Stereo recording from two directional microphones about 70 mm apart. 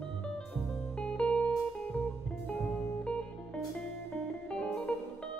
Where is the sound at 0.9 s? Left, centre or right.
Centre.